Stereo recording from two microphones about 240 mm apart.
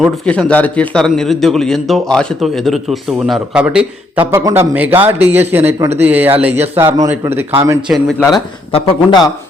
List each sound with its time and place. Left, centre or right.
0.0 s a man's voice: centre
7.9 s a man's voice: centre
8.7 s a man's voice: centre